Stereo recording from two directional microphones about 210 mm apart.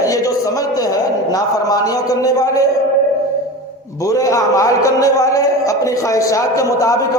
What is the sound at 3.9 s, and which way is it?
A man's voice, 15° left (ahead or behind).